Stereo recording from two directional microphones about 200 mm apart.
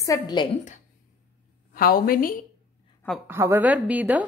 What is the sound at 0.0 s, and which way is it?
Speech, 20° left (ahead or behind).